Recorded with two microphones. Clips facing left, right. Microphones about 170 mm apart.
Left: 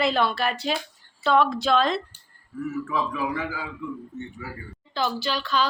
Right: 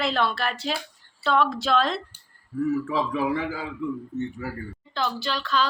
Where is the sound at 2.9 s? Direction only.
30° right (ahead or behind).